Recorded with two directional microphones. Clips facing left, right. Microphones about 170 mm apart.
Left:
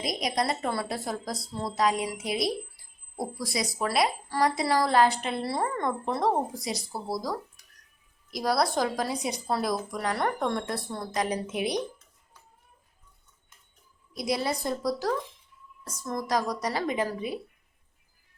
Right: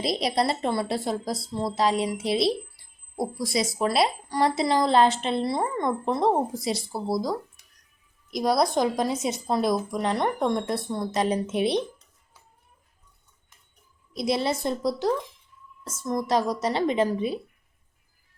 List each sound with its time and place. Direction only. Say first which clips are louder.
0.0 s a woman's voice: right 4 dB; 30° right (ahead or behind)
14.2 s a woman's voice: right 3 dB; 25° right (ahead or behind)